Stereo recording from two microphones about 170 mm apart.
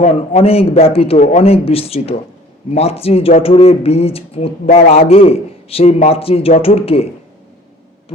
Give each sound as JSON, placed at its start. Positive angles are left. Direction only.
{"t": 0.0, "sound": "a man's voice", "side_deg": 35}